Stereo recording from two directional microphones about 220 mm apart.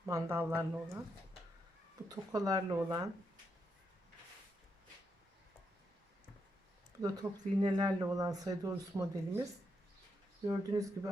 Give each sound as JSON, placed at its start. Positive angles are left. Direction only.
{"t": 0.0, "sound": "speech", "side_deg": -10}
{"t": 2.0, "sound": "speech", "side_deg": -15}
{"t": 7.0, "sound": "speech", "side_deg": -20}